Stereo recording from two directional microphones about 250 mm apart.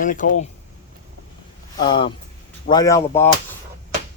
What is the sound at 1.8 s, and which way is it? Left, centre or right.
Speech, centre.